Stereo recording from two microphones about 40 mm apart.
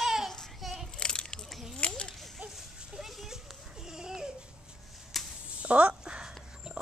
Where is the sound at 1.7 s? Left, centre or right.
Left.